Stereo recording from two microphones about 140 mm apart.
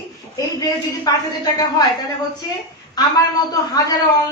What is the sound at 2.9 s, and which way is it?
A woman's voice, 30° left (ahead or behind).